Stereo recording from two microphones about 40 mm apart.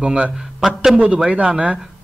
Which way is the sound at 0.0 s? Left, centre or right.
Right.